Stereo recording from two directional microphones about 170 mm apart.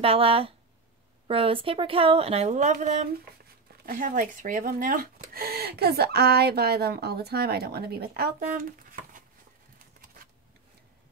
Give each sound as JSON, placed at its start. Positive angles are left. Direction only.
{"t": 0.0, "sound": "a woman's voice", "side_deg": -35}